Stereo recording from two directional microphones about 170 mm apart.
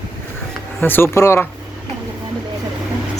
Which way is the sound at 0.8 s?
10° left (ahead or behind).